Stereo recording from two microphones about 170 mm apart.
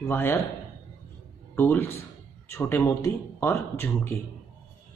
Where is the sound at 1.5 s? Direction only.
15° left (ahead or behind).